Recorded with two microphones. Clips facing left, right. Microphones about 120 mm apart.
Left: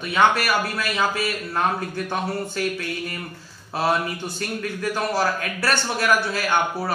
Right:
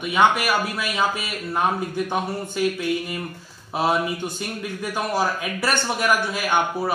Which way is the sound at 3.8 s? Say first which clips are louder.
Right 1 dB; 15° right (ahead or behind).